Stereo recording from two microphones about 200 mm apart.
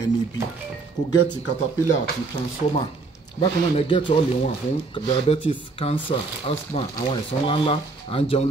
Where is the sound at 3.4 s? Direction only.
25° left (ahead or behind).